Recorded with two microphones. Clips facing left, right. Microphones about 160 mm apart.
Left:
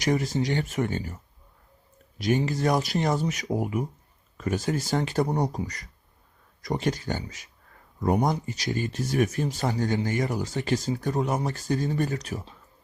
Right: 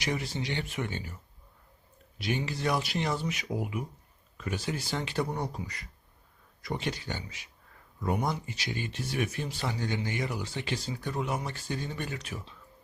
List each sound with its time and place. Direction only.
0.0 s speech: 45° left (ahead or behind)